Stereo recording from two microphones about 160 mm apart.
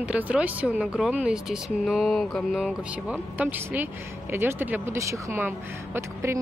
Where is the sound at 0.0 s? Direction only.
10° right (ahead or behind).